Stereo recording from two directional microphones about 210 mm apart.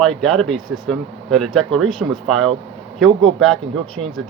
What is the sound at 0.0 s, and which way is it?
Speech, centre (ahead or behind).